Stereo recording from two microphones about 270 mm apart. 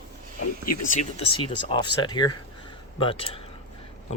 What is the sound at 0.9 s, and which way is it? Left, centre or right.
Speech, left.